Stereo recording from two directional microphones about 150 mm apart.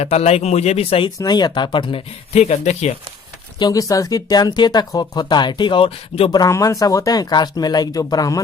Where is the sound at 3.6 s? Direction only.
25° left (ahead or behind).